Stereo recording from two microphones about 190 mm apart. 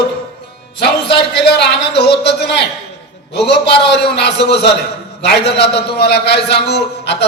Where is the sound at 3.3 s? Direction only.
60° left (ahead or behind).